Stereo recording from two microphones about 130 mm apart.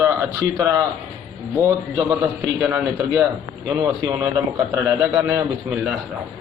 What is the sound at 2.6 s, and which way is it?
Speech, 10° right (ahead or behind).